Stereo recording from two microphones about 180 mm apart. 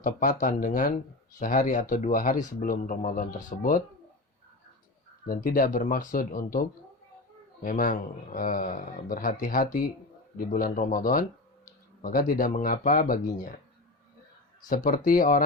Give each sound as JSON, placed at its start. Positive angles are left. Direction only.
{"t": 0.0, "sound": "speech", "side_deg": 50}
{"t": 5.2, "sound": "speech", "side_deg": 50}
{"t": 14.8, "sound": "speech", "side_deg": 50}